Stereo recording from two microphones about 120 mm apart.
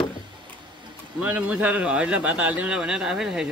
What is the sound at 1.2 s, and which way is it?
Speech, 10° right (ahead or behind).